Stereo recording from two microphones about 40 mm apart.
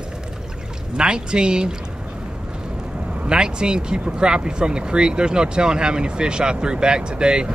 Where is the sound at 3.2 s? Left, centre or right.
Right.